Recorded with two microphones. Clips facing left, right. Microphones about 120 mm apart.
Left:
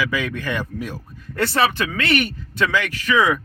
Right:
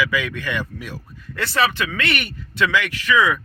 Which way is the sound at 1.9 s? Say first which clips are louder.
Left 4 dB; 35° left (ahead or behind).